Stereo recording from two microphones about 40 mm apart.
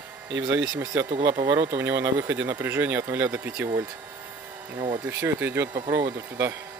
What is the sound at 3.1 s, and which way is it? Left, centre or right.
Speech, right.